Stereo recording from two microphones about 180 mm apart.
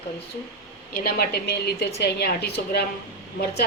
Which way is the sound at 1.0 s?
60° left (ahead or behind).